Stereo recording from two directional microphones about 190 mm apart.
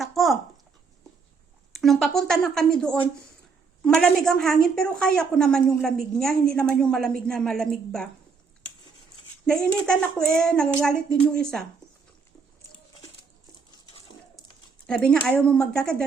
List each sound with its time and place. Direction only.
0.0 s a sound: centre (ahead or behind)
1.7 s a woman's voice: centre (ahead or behind)
9.5 s a woman's voice: 5° left (ahead or behind)
14.8 s a woman's voice: 5° left (ahead or behind)